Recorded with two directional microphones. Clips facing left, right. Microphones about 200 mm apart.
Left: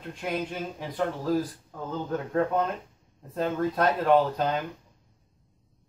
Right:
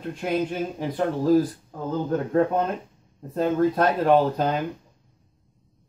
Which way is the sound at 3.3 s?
10° right (ahead or behind).